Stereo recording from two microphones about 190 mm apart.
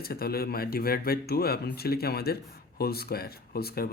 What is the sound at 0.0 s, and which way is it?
Speech, 55° left (ahead or behind).